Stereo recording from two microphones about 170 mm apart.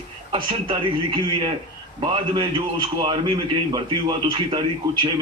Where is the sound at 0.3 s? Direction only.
30° right (ahead or behind).